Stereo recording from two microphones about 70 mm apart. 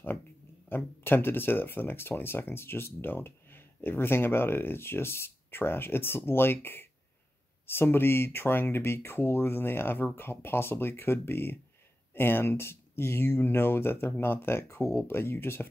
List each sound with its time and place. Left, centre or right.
0.7 s speech: left